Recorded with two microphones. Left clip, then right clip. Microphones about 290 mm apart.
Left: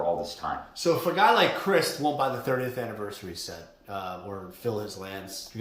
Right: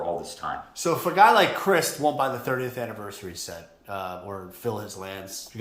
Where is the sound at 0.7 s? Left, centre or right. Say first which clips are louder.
Right 4 dB; centre.